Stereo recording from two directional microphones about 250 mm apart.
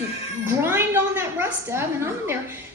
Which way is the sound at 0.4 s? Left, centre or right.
Centre.